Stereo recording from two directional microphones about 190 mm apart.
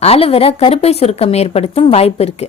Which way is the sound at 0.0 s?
30° left (ahead or behind).